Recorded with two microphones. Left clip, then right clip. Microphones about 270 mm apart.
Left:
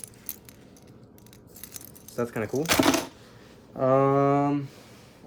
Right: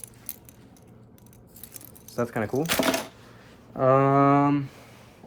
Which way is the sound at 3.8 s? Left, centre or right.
Right.